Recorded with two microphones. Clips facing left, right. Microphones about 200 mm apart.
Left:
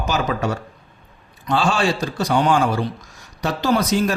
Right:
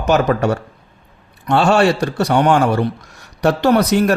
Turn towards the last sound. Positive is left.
turn(degrees=-65)  # may be behind; listen again after turning